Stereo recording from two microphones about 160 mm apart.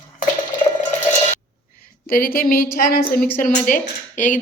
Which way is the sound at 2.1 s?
65° left (ahead or behind).